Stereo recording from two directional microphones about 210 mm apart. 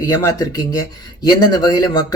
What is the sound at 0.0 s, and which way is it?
A man's voice, 15° left (ahead or behind).